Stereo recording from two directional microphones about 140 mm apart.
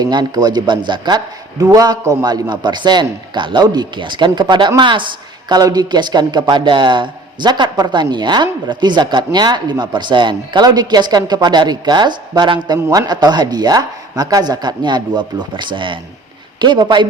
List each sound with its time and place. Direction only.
0.0 s speech: 30° right (ahead or behind)